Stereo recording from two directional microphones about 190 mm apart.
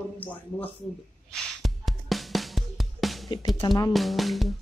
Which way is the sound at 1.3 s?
Centre (ahead or behind).